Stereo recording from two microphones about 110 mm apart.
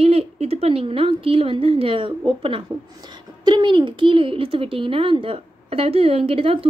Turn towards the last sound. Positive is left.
turn(degrees=-60)  # may be behind; listen again after turning